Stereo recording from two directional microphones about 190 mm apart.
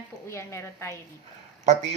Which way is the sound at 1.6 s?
35° right (ahead or behind).